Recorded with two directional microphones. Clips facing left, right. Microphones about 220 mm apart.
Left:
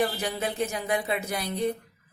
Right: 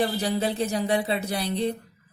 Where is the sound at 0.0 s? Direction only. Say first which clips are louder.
Right 3 dB; 30° right (ahead or behind).